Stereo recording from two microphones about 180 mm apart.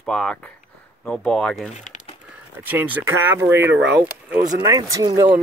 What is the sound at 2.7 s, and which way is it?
Speech, 10° right (ahead or behind).